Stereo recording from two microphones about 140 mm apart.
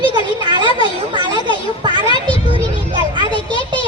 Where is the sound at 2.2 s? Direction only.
35° right (ahead or behind).